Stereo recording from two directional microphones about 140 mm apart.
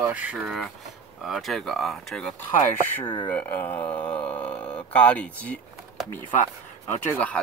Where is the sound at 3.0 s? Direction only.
35° left (ahead or behind).